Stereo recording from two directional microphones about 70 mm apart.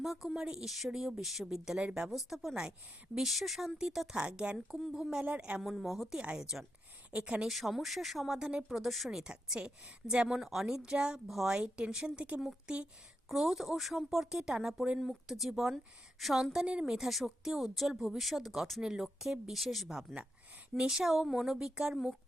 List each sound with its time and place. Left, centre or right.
0.0 s a woman's voice: centre
0.4 s a woman's voice: centre
2.0 s a woman's voice: centre
4.5 s a woman's voice: centre
5.6 s a woman's voice: centre
6.1 s a woman's voice: centre
7.4 s a woman's voice: centre
13.2 s a woman's voice: centre